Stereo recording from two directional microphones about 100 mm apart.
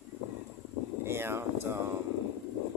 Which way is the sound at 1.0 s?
25° right (ahead or behind).